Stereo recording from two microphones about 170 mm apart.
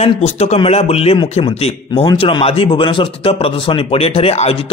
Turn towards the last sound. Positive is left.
turn(degrees=35)  # may be behind; listen again after turning